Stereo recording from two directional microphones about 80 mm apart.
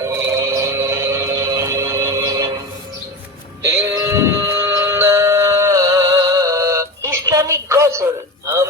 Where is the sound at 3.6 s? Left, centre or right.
Right.